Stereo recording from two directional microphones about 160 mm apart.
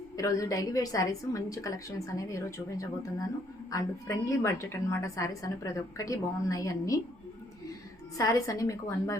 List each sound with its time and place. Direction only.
0.2 s a woman's voice: 20° left (ahead or behind)
8.2 s a woman's voice: 20° left (ahead or behind)